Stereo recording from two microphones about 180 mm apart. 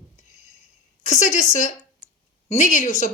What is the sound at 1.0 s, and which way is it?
Speech, 40° left (ahead or behind).